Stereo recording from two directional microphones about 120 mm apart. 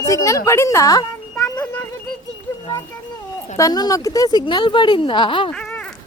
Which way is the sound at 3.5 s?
30° left (ahead or behind).